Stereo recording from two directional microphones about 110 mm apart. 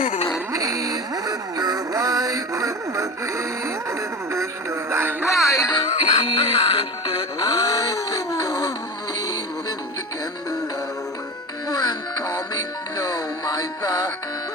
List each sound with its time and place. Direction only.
0.5 s synthetic singing: 30° right (ahead or behind)
4.9 s music: 25° right (ahead or behind)
5.3 s music: 30° left (ahead or behind)
5.7 s music: 50° left (ahead or behind); by 8.7 s 35° left (ahead or behind)
11.7 s music: 40° left (ahead or behind)